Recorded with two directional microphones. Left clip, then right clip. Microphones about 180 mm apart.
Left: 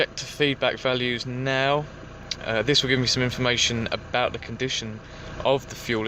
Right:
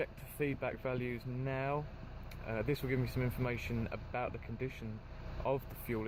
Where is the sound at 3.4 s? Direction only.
5° right (ahead or behind).